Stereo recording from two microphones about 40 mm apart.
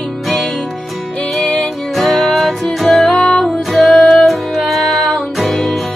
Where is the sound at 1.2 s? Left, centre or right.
Centre.